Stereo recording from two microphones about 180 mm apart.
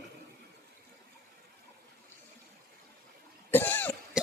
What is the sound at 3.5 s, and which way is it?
Cough, 10° left (ahead or behind).